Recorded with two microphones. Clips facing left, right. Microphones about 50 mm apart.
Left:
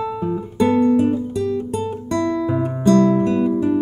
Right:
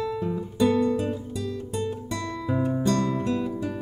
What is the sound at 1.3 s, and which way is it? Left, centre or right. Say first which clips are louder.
Music: left 9 dB; left.